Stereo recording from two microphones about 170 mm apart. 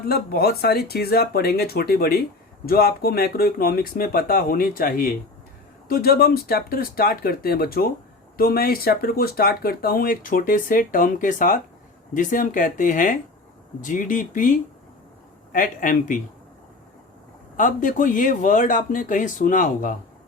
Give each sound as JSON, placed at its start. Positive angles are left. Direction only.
{"t": 0.1, "sound": "speech", "side_deg": 65}
{"t": 15.5, "sound": "speech", "side_deg": 55}
{"t": 17.6, "sound": "speech", "side_deg": 50}